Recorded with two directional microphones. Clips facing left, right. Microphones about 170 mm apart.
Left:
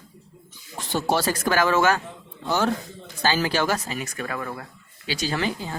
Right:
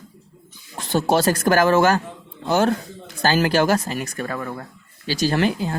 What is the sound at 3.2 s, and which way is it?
Speech, 50° right (ahead or behind).